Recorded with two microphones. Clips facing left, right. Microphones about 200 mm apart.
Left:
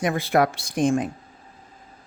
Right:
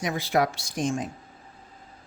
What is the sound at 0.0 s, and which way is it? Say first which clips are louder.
Speech: left 4 dB; 55° left (ahead or behind).